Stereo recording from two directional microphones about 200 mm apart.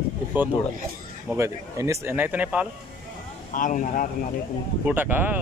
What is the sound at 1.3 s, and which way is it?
Speech, 15° right (ahead or behind).